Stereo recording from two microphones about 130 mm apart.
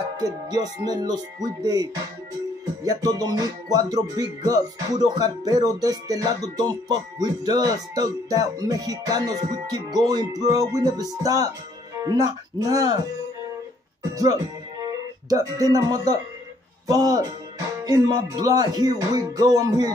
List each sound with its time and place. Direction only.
0.2 s music: 30° right (ahead or behind)
2.8 s speech: 25° right (ahead or behind)
14.1 s speech: 25° right (ahead or behind)